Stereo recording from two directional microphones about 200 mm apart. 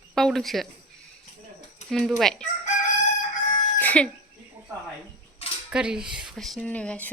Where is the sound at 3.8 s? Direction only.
5° left (ahead or behind).